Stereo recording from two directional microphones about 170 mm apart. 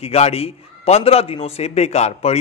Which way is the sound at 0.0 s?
35° left (ahead or behind).